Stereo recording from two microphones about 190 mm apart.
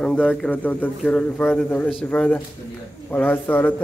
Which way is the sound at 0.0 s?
5° left (ahead or behind).